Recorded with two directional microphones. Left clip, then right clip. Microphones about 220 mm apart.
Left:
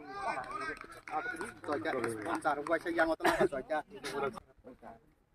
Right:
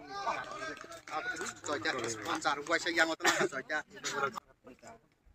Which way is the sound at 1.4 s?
45° left (ahead or behind).